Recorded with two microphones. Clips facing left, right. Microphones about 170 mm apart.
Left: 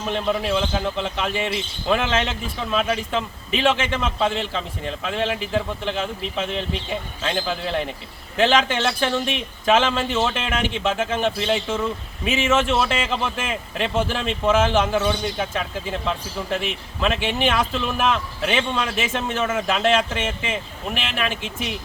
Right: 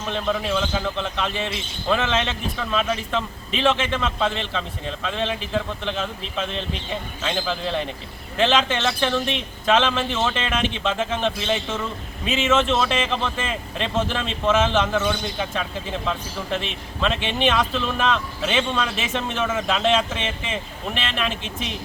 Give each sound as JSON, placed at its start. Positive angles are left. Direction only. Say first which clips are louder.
{"t": 0.0, "sound": "a man's voice", "louder": "left 2 dB", "side_deg": 10}